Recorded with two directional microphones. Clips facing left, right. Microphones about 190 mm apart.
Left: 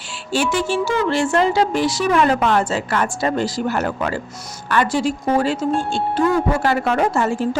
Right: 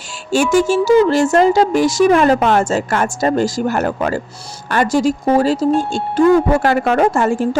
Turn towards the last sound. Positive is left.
turn(degrees=-50)  # may be behind; listen again after turning